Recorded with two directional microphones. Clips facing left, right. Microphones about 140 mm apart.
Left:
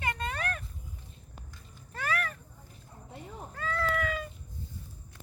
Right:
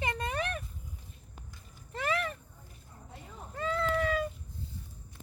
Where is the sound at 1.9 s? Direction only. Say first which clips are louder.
Right 1 dB; 25° right (ahead or behind).